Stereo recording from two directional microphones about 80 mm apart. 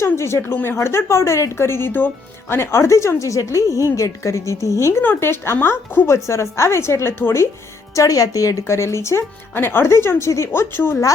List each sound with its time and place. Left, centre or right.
0.0 s speech: left
0.5 s speech: left
0.8 s speech: left
7.9 s speech: left